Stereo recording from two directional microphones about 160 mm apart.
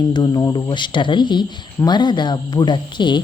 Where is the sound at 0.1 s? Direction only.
25° left (ahead or behind).